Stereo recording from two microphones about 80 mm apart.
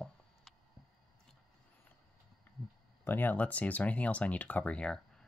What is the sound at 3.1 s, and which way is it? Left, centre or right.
Speech, left.